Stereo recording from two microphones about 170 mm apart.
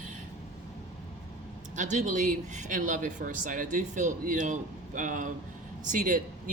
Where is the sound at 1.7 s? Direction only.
45° right (ahead or behind).